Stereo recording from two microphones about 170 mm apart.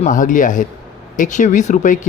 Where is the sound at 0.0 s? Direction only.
50° left (ahead or behind).